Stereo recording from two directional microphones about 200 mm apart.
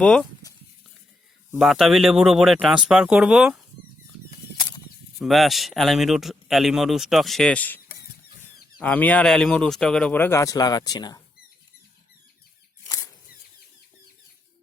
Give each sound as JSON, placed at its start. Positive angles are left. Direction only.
{"t": 0.0, "sound": "speech", "side_deg": 5}
{"t": 1.5, "sound": "speech", "side_deg": 0}
{"t": 4.5, "sound": "a sound", "side_deg": 25}
{"t": 5.2, "sound": "speech", "side_deg": 0}
{"t": 8.8, "sound": "speech", "side_deg": 5}